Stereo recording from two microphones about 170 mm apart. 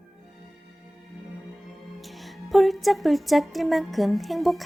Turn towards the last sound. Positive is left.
turn(degrees=0)  # may be behind; listen again after turning